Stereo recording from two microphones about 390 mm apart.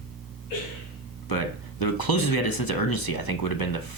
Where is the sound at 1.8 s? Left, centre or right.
Left.